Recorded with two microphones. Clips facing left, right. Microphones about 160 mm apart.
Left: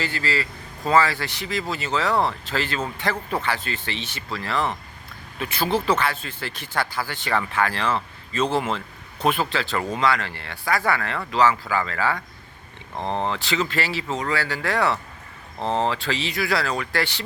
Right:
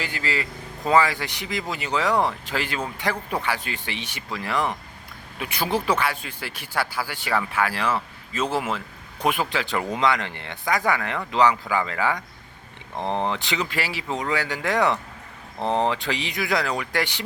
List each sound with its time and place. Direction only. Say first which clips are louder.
0.0 s speech: left 2 dB; 15° right (ahead or behind)